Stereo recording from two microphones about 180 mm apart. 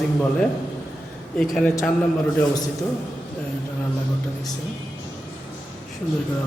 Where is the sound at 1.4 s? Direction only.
5° left (ahead or behind).